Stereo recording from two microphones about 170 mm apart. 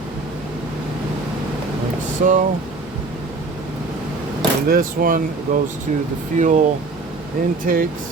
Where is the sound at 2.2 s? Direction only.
50° right (ahead or behind).